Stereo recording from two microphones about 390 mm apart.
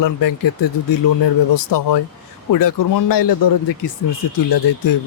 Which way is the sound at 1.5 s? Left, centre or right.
Left.